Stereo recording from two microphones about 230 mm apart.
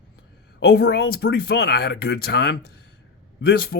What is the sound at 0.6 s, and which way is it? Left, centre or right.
A man's voice, left.